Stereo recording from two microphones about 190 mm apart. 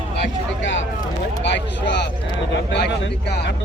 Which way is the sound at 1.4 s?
65° left (ahead or behind).